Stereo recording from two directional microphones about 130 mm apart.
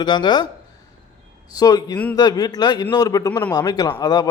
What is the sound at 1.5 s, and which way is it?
A man's voice, 30° left (ahead or behind).